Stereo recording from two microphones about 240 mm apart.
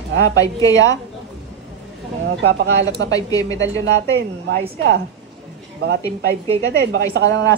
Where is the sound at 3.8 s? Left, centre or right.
Right.